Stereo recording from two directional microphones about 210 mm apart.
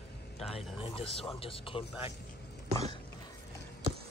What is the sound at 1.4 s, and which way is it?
Speech, 25° left (ahead or behind).